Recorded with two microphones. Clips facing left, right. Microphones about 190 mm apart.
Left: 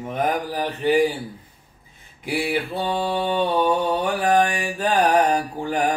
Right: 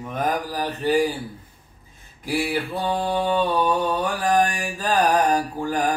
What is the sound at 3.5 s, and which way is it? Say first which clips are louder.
Mantra: left 1 dB; 20° left (ahead or behind).